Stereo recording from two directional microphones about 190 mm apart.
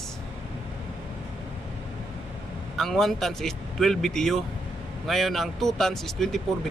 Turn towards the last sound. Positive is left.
turn(degrees=0)  # may be behind; listen again after turning